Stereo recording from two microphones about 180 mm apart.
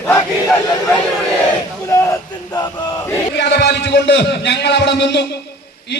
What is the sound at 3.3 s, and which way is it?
A man's voice, 70° left (ahead or behind).